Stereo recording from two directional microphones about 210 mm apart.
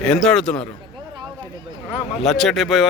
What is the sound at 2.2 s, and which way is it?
Speech, centre (ahead or behind).